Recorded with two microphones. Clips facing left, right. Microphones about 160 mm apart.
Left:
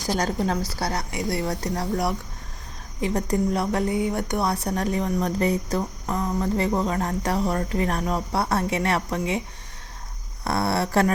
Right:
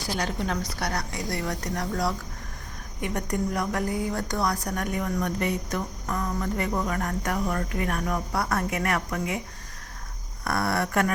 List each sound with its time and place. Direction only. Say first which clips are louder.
0.2 s a woman's voice: left 2 dB; 40° left (ahead or behind)
10.4 s a woman's voice: left 3 dB; 25° left (ahead or behind)